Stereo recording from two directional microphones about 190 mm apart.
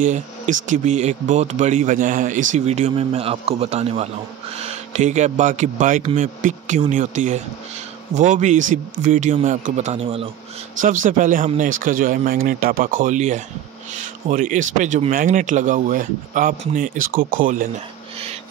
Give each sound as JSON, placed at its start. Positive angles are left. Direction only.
{"t": 0.0, "sound": "speech", "side_deg": -40}